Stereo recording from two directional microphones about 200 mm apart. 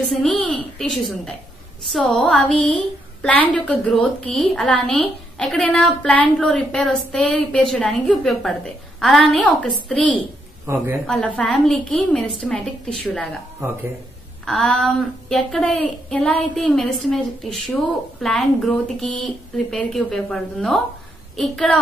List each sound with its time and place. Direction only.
0.1 s a woman's voice: centre (ahead or behind)
10.7 s a woman's voice: 10° right (ahead or behind)
11.1 s a woman's voice: 5° left (ahead or behind)
14.4 s a woman's voice: centre (ahead or behind)